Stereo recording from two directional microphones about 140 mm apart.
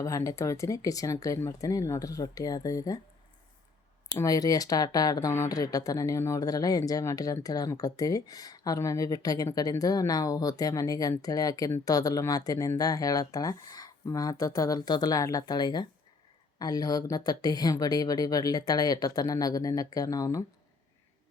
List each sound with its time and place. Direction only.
0.0 s speech: 25° left (ahead or behind)
4.2 s speech: 25° left (ahead or behind)